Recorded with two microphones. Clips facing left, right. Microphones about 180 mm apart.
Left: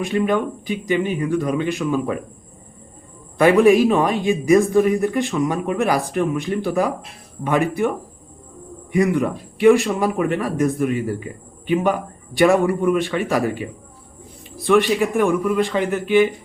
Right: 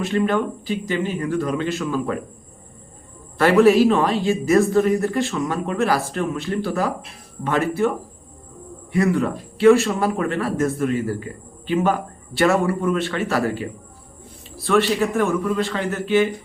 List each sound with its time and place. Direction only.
0.0 s speech: 15° left (ahead or behind)
3.3 s speech: 15° left (ahead or behind)
8.9 s speech: 15° left (ahead or behind)